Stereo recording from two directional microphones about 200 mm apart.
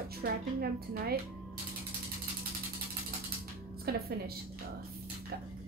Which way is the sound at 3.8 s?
50° right (ahead or behind).